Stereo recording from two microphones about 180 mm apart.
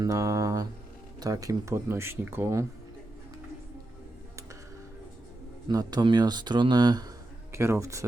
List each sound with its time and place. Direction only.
0.0 s speech: 20° right (ahead or behind)
5.6 s speech: 20° right (ahead or behind)